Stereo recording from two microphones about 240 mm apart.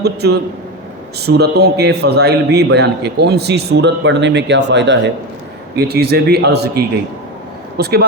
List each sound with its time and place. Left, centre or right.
0.0 s a man's voice: right